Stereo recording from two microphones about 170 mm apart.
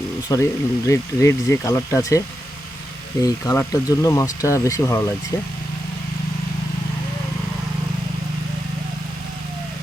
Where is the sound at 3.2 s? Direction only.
20° left (ahead or behind).